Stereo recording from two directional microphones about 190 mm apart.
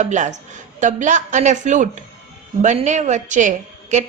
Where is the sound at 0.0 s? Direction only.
40° right (ahead or behind).